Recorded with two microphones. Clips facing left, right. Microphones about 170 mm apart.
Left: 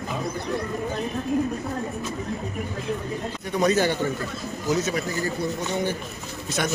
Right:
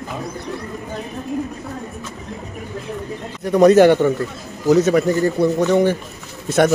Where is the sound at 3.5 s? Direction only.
75° right (ahead or behind).